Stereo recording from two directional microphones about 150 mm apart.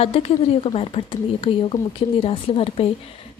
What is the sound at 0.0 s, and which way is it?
Speech, 40° left (ahead or behind).